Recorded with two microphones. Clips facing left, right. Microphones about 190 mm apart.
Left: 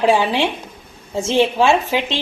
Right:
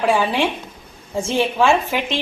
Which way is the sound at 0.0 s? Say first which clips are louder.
Left 2 dB; 20° left (ahead or behind).